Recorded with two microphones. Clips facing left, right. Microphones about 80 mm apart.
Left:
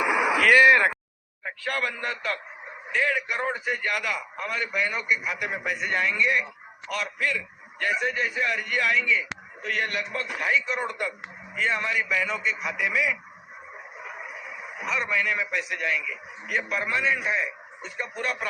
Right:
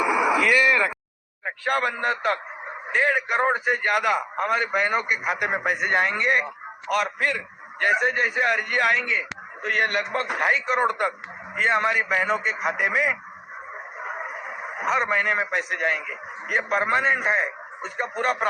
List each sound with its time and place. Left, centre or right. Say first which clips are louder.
1.5 s a man's voice: right 5 dB; right